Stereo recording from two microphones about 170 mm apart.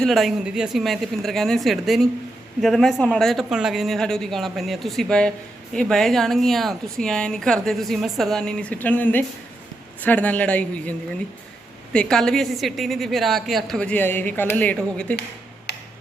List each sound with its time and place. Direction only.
0.0 s a woman's voice: centre (ahead or behind)
11.9 s a woman's voice: 5° left (ahead or behind)
15.7 s tick-tock: 80° left